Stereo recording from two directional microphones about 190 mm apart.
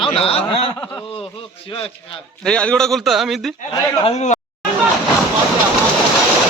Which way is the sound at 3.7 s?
30° left (ahead or behind).